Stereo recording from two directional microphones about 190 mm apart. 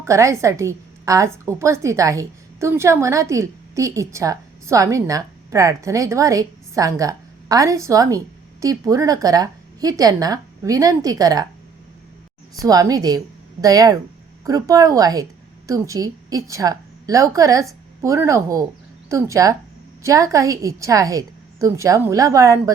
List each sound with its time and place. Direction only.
0.0 s a woman's voice: 15° right (ahead or behind)
12.6 s a woman's voice: 20° right (ahead or behind)